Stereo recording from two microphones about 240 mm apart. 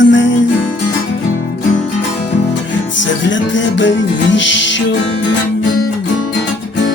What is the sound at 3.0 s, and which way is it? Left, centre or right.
Music, left.